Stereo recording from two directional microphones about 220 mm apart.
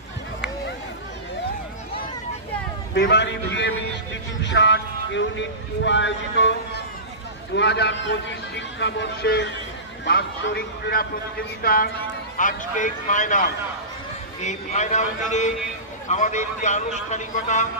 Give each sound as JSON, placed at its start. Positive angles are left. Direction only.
{"t": 2.9, "sound": "a man's voice", "side_deg": 50}